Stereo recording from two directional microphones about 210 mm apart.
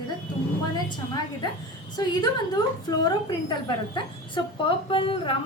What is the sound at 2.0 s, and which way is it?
Speech, 20° left (ahead or behind).